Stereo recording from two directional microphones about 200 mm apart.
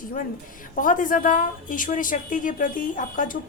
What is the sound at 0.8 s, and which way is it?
A woman's voice, 40° left (ahead or behind).